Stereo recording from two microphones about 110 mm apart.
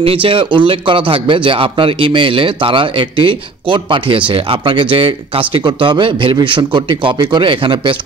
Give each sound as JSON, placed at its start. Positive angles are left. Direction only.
{"t": 0.0, "sound": "speech", "side_deg": -55}